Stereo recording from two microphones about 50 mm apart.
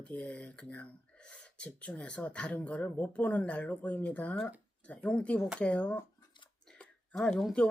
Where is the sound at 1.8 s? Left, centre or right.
Left.